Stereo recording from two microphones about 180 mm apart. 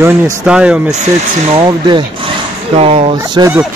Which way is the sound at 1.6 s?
25° right (ahead or behind).